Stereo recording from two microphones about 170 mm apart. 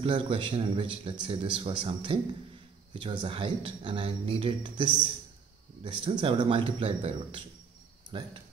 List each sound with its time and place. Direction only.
0.0 s a man's voice: 30° right (ahead or behind)